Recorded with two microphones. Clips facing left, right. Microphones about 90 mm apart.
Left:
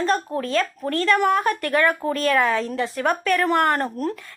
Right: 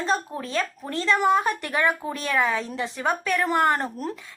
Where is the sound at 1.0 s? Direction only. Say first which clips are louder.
Left 1 dB; 20° right (ahead or behind).